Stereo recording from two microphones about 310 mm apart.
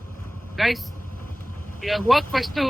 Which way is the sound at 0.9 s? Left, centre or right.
Left.